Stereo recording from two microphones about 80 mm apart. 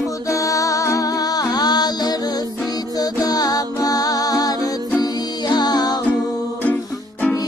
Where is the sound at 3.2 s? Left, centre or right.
Left.